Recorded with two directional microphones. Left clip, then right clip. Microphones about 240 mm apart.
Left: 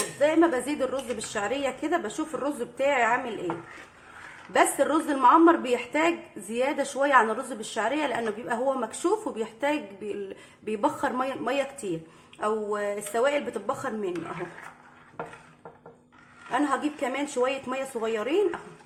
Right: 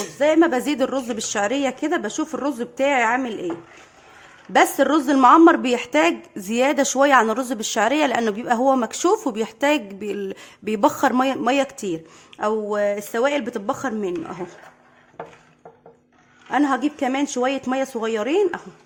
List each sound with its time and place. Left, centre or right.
0.2 s a woman's voice: right
4.5 s a woman's voice: right
16.5 s speech: right